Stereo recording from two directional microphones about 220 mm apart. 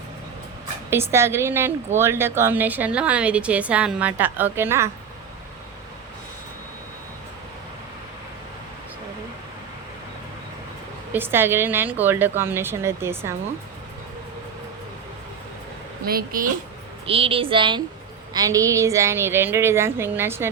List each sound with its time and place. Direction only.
0.9 s a woman's voice: 10° right (ahead or behind)
11.1 s a woman's voice: 10° right (ahead or behind)
16.0 s a woman's voice: 40° right (ahead or behind)
17.1 s a woman's voice: 25° right (ahead or behind)